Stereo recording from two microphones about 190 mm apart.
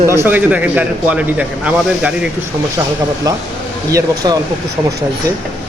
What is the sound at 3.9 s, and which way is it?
Speech, 20° right (ahead or behind).